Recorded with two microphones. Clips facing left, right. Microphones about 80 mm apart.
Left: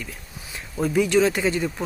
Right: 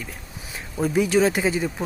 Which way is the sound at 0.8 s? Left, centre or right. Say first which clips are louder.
Even; centre.